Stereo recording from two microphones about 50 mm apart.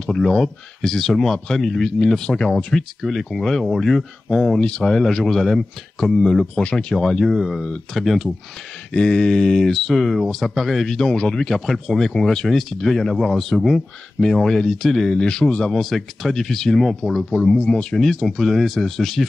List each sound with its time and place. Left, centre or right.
0.1 s speech: centre
3.0 s speech: centre; by 4.9 s left
4.9 s speech: centre
6.5 s speech: centre
8.9 s speech: centre
11.0 s speech: centre
15.1 s speech: centre
15.7 s speech: centre
17.5 s speech: centre
17.9 s speech: centre